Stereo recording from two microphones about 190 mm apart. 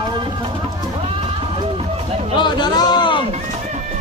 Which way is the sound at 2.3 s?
25° left (ahead or behind).